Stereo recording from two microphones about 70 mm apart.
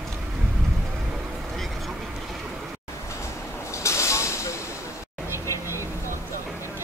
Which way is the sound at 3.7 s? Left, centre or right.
Left.